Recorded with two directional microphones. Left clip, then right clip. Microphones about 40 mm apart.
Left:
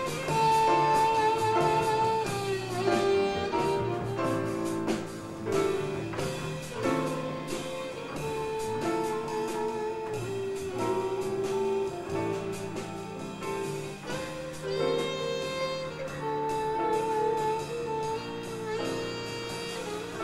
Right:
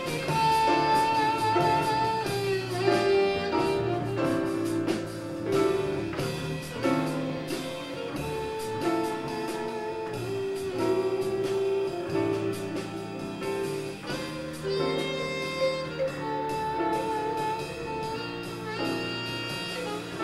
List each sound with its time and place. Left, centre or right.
0.3 s music: left
8.8 s music: left
10.8 s music: left
14.7 s music: left
16.3 s music: left